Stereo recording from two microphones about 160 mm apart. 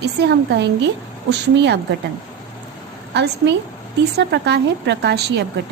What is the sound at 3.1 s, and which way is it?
A woman's voice, 90° right.